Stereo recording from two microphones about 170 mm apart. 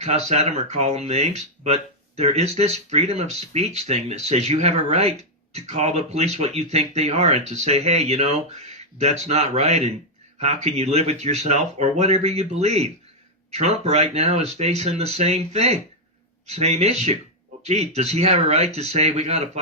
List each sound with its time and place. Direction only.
0.0 s speech: 40° right (ahead or behind)